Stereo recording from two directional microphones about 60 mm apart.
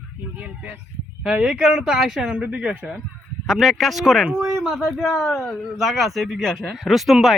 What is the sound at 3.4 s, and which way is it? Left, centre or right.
Speech, centre.